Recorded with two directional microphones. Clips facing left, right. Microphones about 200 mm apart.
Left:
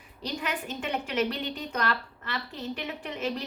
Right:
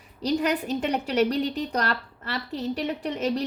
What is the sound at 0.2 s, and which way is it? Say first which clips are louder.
A woman's voice: right 9 dB; 40° right (ahead or behind).